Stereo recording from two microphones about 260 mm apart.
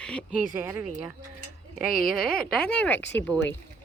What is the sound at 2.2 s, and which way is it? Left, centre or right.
Speech, centre.